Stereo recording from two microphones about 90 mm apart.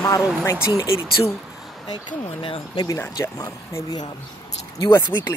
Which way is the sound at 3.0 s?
35° left (ahead or behind).